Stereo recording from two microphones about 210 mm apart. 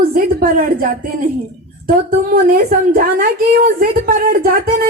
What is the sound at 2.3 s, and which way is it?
Speech, 45° right (ahead or behind).